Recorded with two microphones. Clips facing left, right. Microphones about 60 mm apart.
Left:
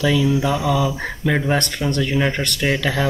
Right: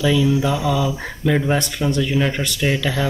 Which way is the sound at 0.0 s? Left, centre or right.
Centre.